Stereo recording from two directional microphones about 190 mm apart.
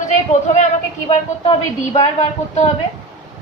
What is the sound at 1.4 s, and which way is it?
Speech, 30° left (ahead or behind).